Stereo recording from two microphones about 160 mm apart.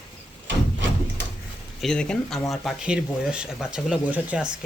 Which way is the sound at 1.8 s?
5° left (ahead or behind).